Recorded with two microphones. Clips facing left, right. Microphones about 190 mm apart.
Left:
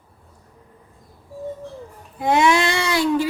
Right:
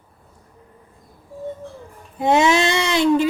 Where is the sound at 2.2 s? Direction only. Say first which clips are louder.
Right 1 dB; 25° right (ahead or behind).